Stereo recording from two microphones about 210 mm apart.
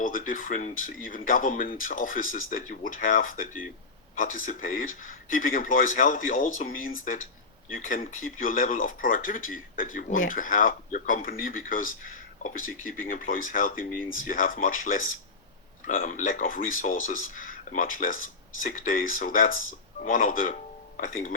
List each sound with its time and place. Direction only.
0.0 s speech: 40° left (ahead or behind)